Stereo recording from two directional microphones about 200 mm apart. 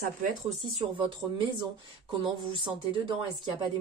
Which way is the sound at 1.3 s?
25° right (ahead or behind).